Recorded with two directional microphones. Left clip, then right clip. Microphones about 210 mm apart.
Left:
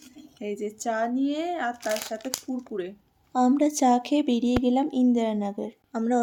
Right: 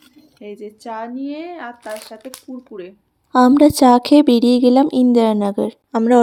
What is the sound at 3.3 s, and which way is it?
Speech, 35° right (ahead or behind).